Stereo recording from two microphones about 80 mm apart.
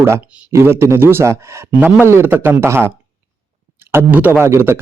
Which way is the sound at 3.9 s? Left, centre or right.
Right.